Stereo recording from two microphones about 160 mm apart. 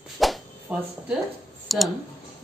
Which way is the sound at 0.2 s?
Centre (ahead or behind).